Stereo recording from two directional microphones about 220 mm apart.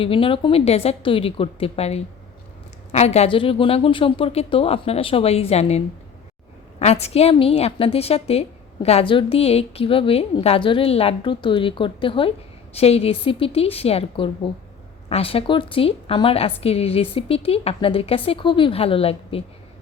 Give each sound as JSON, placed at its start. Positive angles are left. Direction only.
{"t": 0.0, "sound": "a woman's voice", "side_deg": 25}